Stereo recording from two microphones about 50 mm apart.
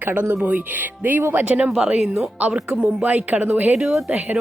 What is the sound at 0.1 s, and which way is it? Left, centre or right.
A woman's voice, right.